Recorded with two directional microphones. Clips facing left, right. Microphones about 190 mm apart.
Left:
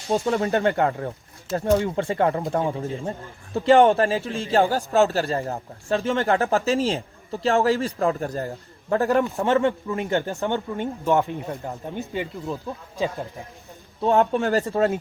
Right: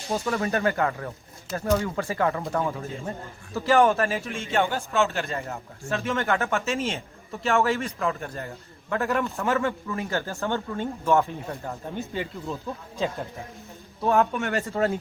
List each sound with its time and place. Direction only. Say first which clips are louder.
0.1 s a man's voice: left 4 dB; 25° left (ahead or behind)
14.0 s a man's voice: left 3 dB; 30° left (ahead or behind)